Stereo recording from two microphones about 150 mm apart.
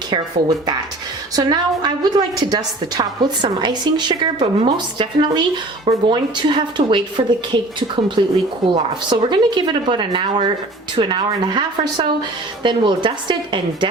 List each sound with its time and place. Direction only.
0.1 s a woman's voice: 30° right (ahead or behind)